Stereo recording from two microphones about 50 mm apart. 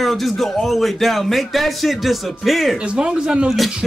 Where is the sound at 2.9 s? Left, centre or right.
Centre.